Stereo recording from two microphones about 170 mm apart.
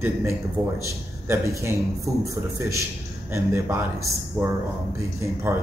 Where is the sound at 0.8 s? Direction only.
15° right (ahead or behind).